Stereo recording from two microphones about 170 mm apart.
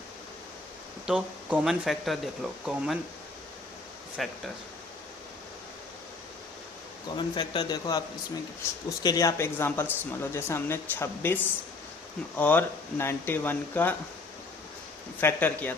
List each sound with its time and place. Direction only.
1.0 s speech: 5° right (ahead or behind)
4.2 s speech: centre (ahead or behind)
7.2 s speech: 30° left (ahead or behind)
9.0 s speech: 20° left (ahead or behind)
12.4 s speech: 10° left (ahead or behind)
15.2 s speech: 10° left (ahead or behind)